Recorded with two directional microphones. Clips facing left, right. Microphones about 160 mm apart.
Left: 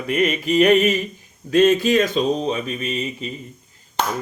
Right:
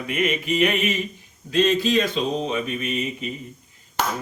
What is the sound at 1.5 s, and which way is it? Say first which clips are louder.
Speech: left 4 dB; 50° left (ahead or behind).